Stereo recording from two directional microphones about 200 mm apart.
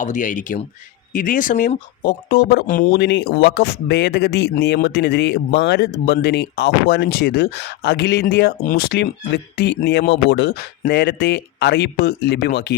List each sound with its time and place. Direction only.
0.0 s speech: 40° left (ahead or behind); by 2.6 s 55° left (ahead or behind)
2.6 s speech: 40° left (ahead or behind)
2.9 s speech: 55° left (ahead or behind)